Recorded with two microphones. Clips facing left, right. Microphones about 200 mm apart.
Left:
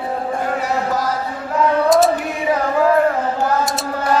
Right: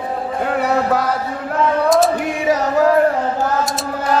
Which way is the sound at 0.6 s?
65° right (ahead or behind).